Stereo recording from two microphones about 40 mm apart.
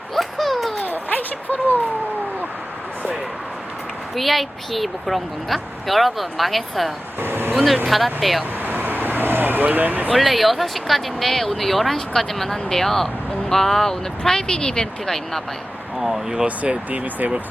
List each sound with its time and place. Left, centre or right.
0.1 s a sound: centre
1.1 s a sound: left
4.1 s speech: centre
7.2 s vehicle: right
7.5 s speech: centre
8.6 s vehicle: right
10.1 s speech: centre
16.0 s speech: centre
16.3 s speech: right
16.9 s speech: right